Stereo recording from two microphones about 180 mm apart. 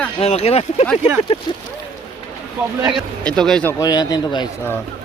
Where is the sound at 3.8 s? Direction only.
20° left (ahead or behind).